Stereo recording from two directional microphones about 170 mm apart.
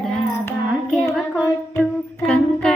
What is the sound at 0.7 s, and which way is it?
Child singing, centre (ahead or behind).